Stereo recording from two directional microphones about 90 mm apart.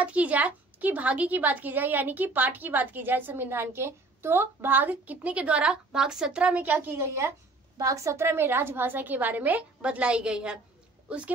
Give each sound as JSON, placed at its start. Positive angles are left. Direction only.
{"t": 0.0, "sound": "a woman's voice", "side_deg": -15}